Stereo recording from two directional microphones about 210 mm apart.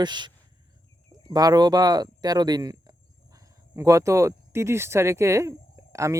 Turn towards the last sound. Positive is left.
turn(degrees=-15)  # may be behind; listen again after turning